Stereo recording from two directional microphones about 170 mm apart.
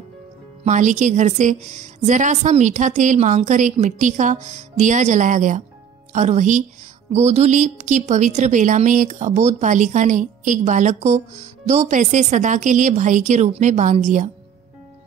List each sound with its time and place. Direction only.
0.7 s a woman's voice: 45° right (ahead or behind)